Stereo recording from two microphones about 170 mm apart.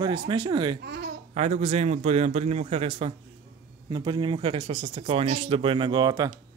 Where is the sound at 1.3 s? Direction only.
40° right (ahead or behind).